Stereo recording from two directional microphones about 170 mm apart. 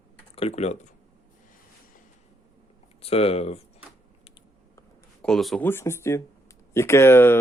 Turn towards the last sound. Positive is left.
turn(degrees=15)  # may be behind; listen again after turning